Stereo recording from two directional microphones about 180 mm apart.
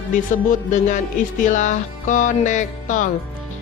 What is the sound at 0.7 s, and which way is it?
Speech, 45° left (ahead or behind).